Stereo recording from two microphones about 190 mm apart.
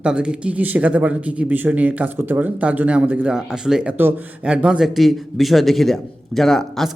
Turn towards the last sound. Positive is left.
turn(degrees=0)  # may be behind; listen again after turning